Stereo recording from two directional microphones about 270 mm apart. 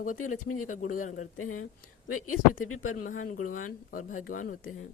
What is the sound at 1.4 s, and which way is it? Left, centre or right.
Speech, left.